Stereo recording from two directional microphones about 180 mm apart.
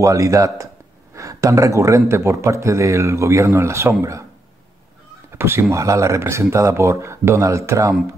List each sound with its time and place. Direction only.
0.0 s speech: 20° right (ahead or behind)
5.3 s speech: 15° right (ahead or behind)